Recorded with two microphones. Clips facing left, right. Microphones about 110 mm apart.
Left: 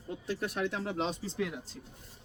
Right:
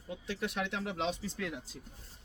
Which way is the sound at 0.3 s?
40° left (ahead or behind).